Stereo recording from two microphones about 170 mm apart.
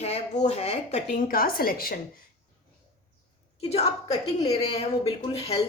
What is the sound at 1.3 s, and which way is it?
Speech, 60° left (ahead or behind).